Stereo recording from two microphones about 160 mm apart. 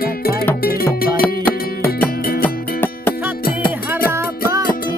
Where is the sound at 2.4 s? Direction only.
15° left (ahead or behind).